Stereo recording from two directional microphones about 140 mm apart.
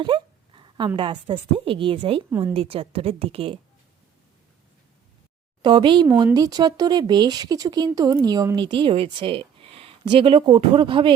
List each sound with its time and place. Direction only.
0.0 s a sound: 35° right (ahead or behind)
0.9 s a woman's voice: 35° right (ahead or behind)
5.6 s speech: 35° right (ahead or behind)